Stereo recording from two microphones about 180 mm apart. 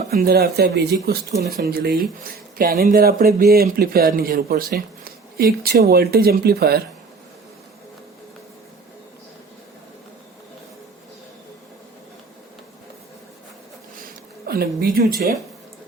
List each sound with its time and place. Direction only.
0.1 s speech: 60° right (ahead or behind)
14.4 s speech: 60° right (ahead or behind)